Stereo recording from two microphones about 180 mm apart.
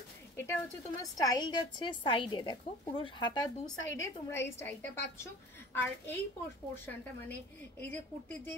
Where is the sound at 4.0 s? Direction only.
15° left (ahead or behind).